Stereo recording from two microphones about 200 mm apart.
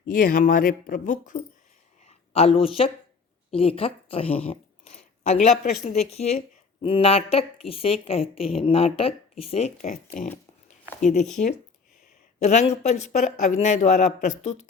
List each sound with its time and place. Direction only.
0.0 s speech: 45° left (ahead or behind)
12.4 s speech: 35° left (ahead or behind)